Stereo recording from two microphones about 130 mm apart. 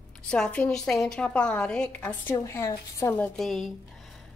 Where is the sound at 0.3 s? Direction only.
10° left (ahead or behind).